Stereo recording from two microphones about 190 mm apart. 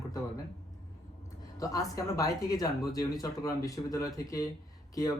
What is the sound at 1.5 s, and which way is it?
Speech, 20° left (ahead or behind).